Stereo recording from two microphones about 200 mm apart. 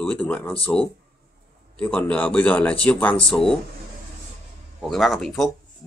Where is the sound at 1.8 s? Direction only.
5° left (ahead or behind).